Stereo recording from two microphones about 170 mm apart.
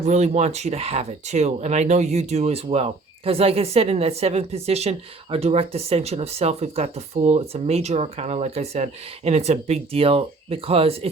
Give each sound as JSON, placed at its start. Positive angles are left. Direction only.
{"t": 0.0, "sound": "speech", "side_deg": -40}